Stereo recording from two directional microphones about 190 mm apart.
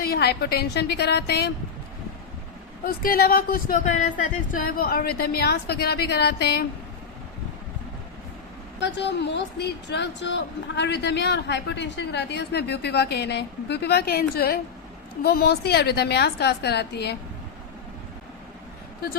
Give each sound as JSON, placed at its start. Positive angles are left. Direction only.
{"t": 0.0, "sound": "a woman's voice", "side_deg": 55}
{"t": 2.8, "sound": "speech", "side_deg": 50}
{"t": 4.5, "sound": "a woman's voice", "side_deg": 50}
{"t": 8.8, "sound": "a woman's voice", "side_deg": 65}